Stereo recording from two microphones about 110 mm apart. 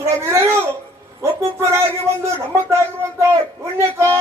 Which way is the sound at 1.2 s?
25° right (ahead or behind).